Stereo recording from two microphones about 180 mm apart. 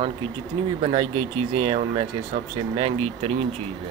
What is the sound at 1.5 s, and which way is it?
Speech, 30° right (ahead or behind).